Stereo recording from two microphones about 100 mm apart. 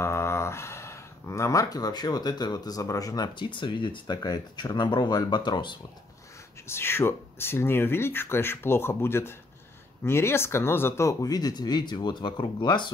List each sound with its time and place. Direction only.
0.0 s speech: 30° left (ahead or behind); by 5.8 s 50° left (ahead or behind)
6.7 s speech: 25° left (ahead or behind); by 12.9 s 50° left (ahead or behind)